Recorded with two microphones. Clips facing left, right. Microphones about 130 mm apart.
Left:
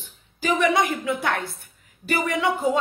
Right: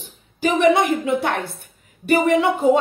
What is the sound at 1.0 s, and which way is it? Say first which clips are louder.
A woman's voice: right 4 dB; 20° right (ahead or behind).